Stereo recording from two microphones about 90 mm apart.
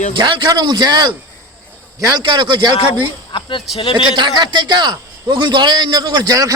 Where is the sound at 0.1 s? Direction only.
60° right (ahead or behind).